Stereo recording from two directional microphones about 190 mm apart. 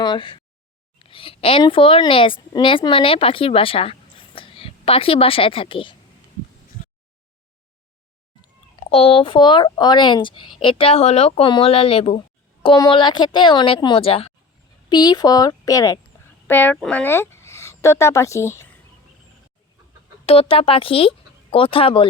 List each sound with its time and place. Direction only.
0.0 s a sound: 25° left (ahead or behind)
0.9 s a woman's voice: 30° left (ahead or behind)
8.9 s a woman's voice: 30° left (ahead or behind); by 18.7 s 15° left (ahead or behind)
20.2 s a woman's voice: 30° left (ahead or behind)